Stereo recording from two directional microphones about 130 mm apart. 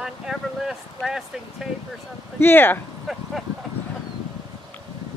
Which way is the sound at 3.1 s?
Centre (ahead or behind).